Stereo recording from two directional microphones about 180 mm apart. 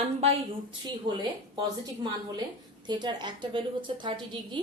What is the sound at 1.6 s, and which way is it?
A woman's voice, 20° right (ahead or behind).